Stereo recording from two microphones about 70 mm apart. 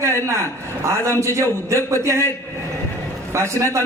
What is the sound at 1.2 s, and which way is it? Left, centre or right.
A man's voice, right.